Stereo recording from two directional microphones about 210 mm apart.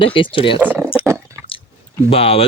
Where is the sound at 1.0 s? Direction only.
15° right (ahead or behind).